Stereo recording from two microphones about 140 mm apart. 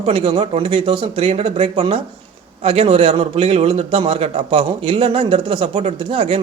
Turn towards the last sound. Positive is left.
turn(degrees=-40)  # may be behind; listen again after turning